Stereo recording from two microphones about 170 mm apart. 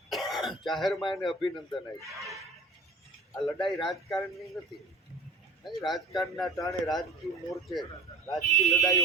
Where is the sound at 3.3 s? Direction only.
Centre (ahead or behind).